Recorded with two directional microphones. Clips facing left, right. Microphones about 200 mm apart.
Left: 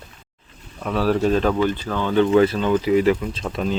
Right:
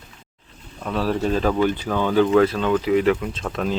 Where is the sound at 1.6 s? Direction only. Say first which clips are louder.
Right 1 dB; 15° right (ahead or behind).